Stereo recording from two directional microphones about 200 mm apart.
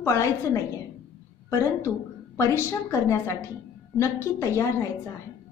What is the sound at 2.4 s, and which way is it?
A woman's voice, 15° left (ahead or behind).